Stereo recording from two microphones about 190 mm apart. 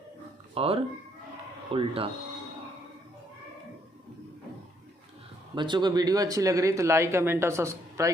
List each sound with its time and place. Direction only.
0.5 s speech: 30° right (ahead or behind)
5.5 s speech: 25° right (ahead or behind)